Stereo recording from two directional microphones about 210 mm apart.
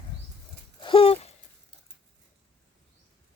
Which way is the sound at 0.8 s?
25° left (ahead or behind).